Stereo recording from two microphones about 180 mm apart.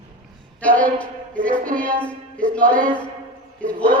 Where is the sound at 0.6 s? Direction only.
5° left (ahead or behind).